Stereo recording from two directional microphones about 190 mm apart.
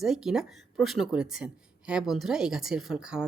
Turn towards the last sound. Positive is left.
turn(degrees=-5)  # may be behind; listen again after turning